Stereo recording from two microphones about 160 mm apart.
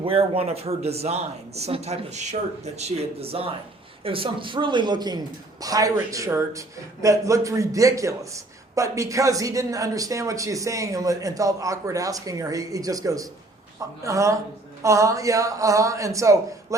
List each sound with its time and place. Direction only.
0.0 s speech: 35° right (ahead or behind); by 16.7 s 20° right (ahead or behind)